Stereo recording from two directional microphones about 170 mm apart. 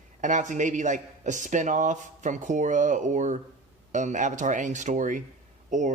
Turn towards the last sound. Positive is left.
turn(degrees=-45)  # may be behind; listen again after turning